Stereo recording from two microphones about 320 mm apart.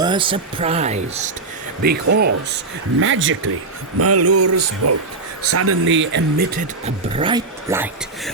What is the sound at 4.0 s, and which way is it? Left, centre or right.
Speech, right.